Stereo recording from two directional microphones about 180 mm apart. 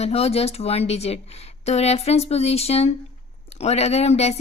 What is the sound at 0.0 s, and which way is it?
Speech, 35° left (ahead or behind).